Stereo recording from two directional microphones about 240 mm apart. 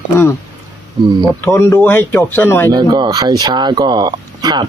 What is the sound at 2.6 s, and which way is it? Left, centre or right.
Speech, centre.